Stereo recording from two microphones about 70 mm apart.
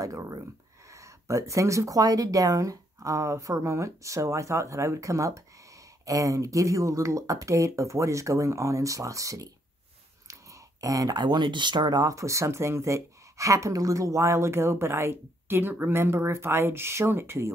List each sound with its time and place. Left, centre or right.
0.0 s speech: right